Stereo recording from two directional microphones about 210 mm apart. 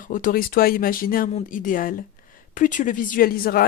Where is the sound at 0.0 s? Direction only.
40° left (ahead or behind).